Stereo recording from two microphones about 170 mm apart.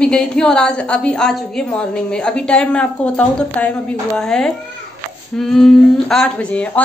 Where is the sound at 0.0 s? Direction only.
5° left (ahead or behind).